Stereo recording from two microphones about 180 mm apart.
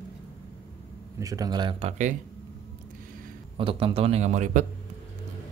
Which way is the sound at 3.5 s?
30° right (ahead or behind).